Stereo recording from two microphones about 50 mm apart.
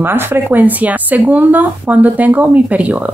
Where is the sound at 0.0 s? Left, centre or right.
Right.